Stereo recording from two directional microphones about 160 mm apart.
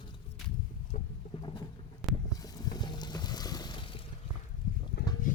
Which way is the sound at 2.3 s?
25° left (ahead or behind).